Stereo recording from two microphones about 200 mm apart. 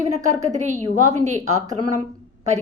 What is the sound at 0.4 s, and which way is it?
A woman's voice, 35° right (ahead or behind).